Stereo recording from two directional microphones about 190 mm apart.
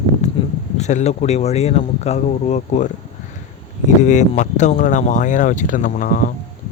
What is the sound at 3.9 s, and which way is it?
Speech, 40° left (ahead or behind).